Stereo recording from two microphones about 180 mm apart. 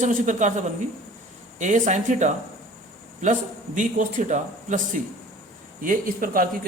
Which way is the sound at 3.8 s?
45° right (ahead or behind).